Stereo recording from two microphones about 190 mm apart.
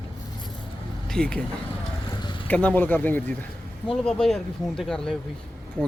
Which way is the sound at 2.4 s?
5° left (ahead or behind).